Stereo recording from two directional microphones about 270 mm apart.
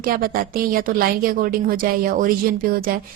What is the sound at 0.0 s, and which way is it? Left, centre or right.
A woman's voice, right.